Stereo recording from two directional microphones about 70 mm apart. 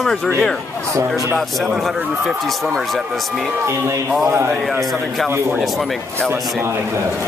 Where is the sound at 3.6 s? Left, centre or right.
Right.